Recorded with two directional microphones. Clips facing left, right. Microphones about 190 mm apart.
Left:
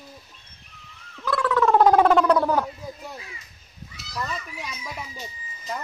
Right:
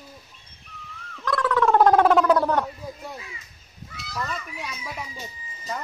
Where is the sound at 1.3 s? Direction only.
5° left (ahead or behind).